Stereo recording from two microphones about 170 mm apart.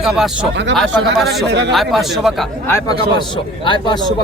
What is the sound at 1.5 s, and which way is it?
Speech, 90° right.